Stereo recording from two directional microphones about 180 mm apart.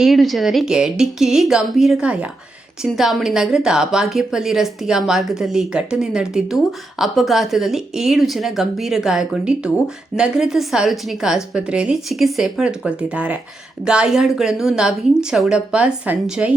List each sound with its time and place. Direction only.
0.0 s a woman's voice: centre (ahead or behind)